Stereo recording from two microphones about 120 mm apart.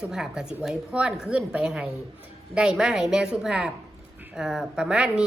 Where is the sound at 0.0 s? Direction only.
5° right (ahead or behind).